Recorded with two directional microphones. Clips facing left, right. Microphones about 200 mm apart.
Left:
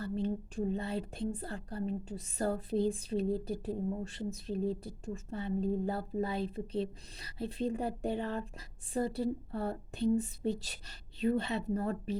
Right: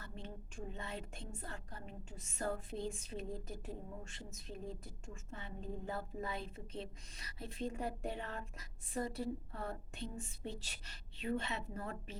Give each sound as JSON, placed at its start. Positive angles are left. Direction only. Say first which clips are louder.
{"t": 0.0, "sound": "a woman's voice", "louder": "left 15 dB", "side_deg": 35}